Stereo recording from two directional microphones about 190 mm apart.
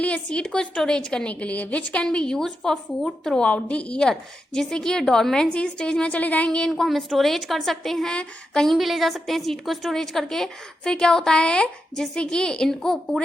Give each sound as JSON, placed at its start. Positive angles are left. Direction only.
{"t": 0.0, "sound": "a woman's voice", "side_deg": 5}